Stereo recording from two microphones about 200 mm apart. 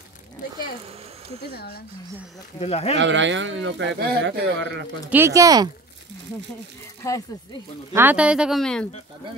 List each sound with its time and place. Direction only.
1.4 s speech: 50° left (ahead or behind)
2.6 s speech: 30° left (ahead or behind)
3.0 s speech: 65° right (ahead or behind)
5.1 s speech: 15° right (ahead or behind)
7.0 s speech: 15° left (ahead or behind)
7.9 s speech: 10° right (ahead or behind)